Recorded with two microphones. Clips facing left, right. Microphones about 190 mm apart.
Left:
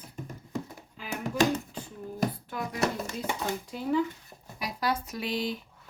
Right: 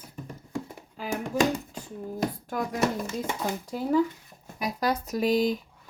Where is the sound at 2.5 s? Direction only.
45° right (ahead or behind).